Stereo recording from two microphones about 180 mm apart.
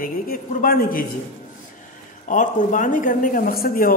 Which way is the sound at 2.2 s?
45° left (ahead or behind).